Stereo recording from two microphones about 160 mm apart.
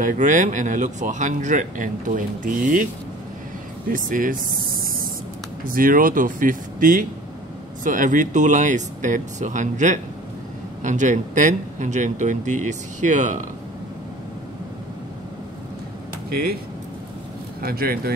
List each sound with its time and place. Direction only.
0.0 s speech: 50° right (ahead or behind)
3.9 s speech: 55° right (ahead or behind)
17.6 s speech: 70° right (ahead or behind)